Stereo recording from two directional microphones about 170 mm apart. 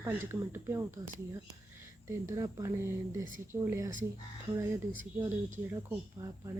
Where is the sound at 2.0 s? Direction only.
20° right (ahead or behind).